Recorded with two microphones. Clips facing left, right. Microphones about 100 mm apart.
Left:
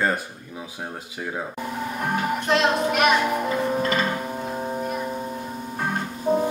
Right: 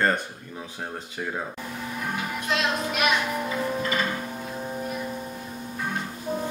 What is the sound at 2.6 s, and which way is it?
Speech, 35° left (ahead or behind).